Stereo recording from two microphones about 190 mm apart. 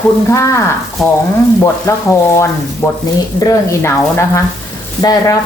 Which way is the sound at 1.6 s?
15° left (ahead or behind).